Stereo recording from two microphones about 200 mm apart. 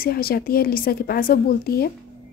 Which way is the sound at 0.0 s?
50° left (ahead or behind).